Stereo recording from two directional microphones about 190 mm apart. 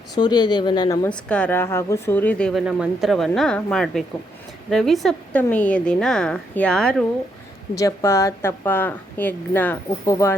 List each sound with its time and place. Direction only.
0.1 s speech: 20° left (ahead or behind)
1.0 s speech: 5° left (ahead or behind)
7.8 s a woman's voice: 15° left (ahead or behind)